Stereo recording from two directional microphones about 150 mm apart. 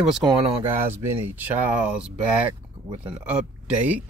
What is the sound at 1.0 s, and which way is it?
Speech, 10° right (ahead or behind).